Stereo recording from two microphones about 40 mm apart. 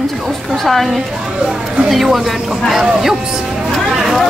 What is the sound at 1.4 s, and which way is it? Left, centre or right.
Speech, centre.